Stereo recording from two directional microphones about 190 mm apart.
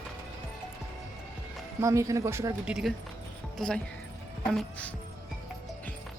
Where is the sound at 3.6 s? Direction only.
5° left (ahead or behind).